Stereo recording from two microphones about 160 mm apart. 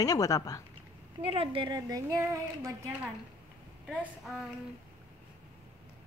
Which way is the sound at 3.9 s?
Centre (ahead or behind).